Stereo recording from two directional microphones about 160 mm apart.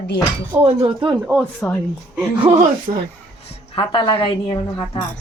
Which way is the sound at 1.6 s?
5° left (ahead or behind).